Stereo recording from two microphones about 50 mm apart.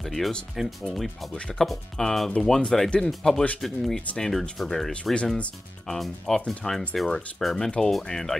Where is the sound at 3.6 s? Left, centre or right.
Centre.